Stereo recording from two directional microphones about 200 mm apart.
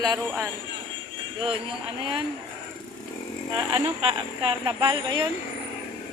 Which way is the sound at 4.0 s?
30° right (ahead or behind).